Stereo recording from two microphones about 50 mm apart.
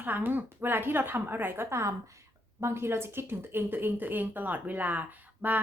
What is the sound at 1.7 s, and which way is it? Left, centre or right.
Speech, right.